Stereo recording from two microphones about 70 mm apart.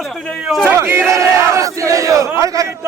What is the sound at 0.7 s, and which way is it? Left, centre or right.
Speech, right.